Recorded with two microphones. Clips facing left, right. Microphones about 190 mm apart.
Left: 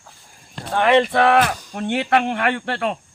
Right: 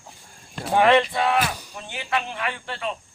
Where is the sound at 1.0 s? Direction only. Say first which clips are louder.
Left 7 dB; 70° left (ahead or behind).